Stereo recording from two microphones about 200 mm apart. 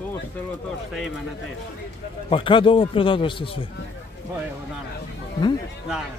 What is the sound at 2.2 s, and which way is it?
Speech, 25° left (ahead or behind).